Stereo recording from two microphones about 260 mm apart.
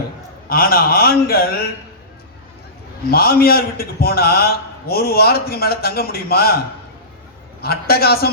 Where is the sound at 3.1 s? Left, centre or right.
Left.